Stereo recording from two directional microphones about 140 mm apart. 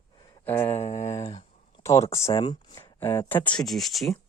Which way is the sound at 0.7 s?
50° left (ahead or behind).